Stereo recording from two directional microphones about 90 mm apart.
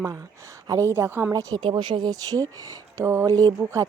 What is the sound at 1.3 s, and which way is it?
Speech, 40° right (ahead or behind).